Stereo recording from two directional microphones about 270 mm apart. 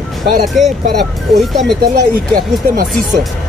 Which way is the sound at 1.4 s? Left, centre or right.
Centre.